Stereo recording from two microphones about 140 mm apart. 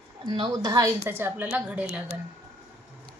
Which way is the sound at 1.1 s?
15° right (ahead or behind).